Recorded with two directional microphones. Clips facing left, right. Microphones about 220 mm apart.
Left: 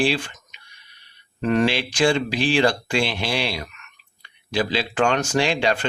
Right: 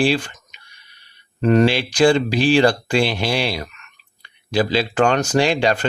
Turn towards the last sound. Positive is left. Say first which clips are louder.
# right 4 dB
turn(degrees=-40)  # may be behind; listen again after turning